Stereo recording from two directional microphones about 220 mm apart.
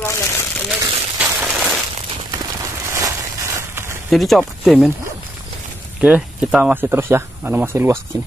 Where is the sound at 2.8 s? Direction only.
15° right (ahead or behind).